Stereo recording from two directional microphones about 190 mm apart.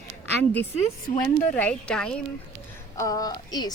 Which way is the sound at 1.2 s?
5° left (ahead or behind).